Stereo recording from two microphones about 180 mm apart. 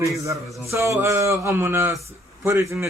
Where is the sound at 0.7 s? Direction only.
15° right (ahead or behind).